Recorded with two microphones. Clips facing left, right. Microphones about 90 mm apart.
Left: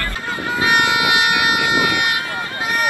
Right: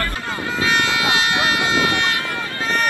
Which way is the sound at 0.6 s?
20° left (ahead or behind).